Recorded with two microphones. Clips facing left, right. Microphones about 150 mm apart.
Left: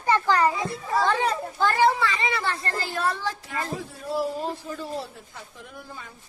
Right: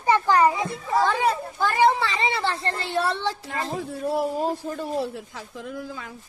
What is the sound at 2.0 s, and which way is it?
Speech, 30° right (ahead or behind).